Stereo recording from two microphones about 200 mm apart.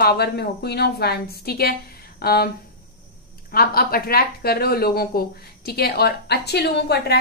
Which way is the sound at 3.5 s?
50° left (ahead or behind).